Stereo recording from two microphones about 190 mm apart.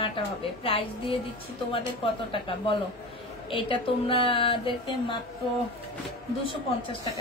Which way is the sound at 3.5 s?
25° left (ahead or behind).